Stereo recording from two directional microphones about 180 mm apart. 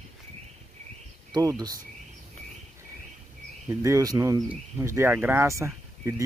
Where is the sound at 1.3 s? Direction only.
20° right (ahead or behind).